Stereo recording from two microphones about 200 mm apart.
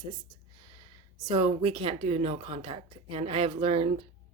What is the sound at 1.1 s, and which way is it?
A woman's voice, 20° right (ahead or behind).